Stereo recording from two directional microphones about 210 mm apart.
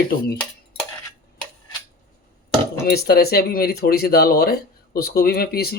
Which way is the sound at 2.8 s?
50° left (ahead or behind).